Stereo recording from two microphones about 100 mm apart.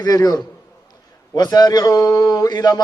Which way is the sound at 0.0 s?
40° left (ahead or behind).